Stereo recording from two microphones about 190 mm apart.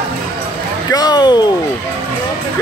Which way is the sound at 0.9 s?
20° left (ahead or behind).